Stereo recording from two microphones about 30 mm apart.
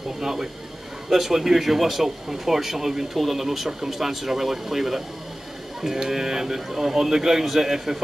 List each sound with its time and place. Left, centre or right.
0.2 s speech: centre